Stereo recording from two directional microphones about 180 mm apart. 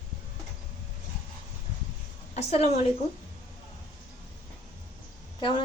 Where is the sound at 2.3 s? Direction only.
35° left (ahead or behind).